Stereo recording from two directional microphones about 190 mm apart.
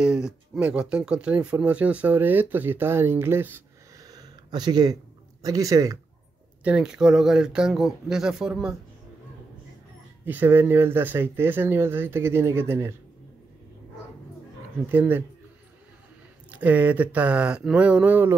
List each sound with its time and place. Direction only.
0.0 s speech: 5° right (ahead or behind)
6.6 s speech: 5° right (ahead or behind)
10.2 s speech: 10° right (ahead or behind)
14.9 s speech: 10° right (ahead or behind)
16.4 s speech: 10° right (ahead or behind)